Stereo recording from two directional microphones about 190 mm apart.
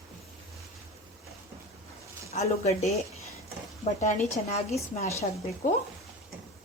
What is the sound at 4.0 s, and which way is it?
Speech, 40° left (ahead or behind).